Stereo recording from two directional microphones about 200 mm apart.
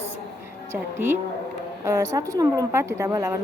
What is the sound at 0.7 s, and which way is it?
A woman's voice, 10° right (ahead or behind).